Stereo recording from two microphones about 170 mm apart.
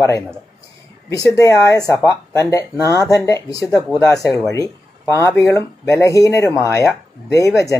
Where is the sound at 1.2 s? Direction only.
20° left (ahead or behind).